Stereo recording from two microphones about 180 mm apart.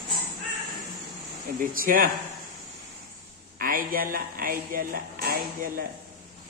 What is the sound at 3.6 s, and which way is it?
Speech, 50° right (ahead or behind).